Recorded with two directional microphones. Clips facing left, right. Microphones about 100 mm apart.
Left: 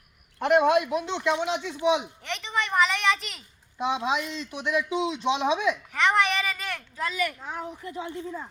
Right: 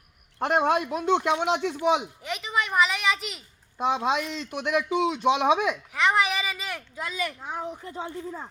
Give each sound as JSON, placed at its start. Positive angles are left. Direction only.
{"t": 0.3, "sound": "a man's voice", "side_deg": -35}
{"t": 2.2, "sound": "a woman's voice", "side_deg": -5}
{"t": 3.8, "sound": "a man's voice", "side_deg": -45}
{"t": 5.9, "sound": "speech", "side_deg": -5}
{"t": 7.9, "sound": "speech", "side_deg": -30}